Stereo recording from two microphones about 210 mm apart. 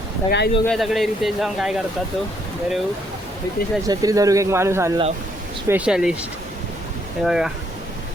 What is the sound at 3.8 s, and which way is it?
Speech, 15° right (ahead or behind).